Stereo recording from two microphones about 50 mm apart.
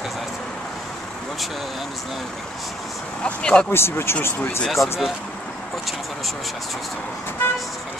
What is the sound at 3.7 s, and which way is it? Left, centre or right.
Speech, left.